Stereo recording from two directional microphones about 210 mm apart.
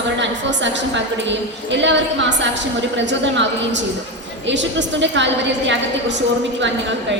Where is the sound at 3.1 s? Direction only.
60° right (ahead or behind).